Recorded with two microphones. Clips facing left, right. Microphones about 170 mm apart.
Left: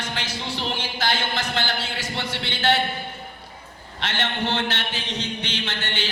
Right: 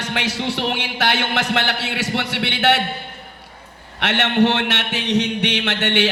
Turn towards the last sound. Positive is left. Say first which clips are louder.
# right 10 dB
turn(degrees=-75)  # may be behind; listen again after turning